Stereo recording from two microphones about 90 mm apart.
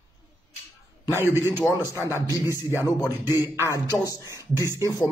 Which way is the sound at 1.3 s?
25° right (ahead or behind).